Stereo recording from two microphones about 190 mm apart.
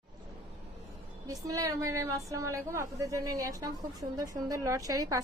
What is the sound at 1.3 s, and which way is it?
A woman's voice, 20° right (ahead or behind).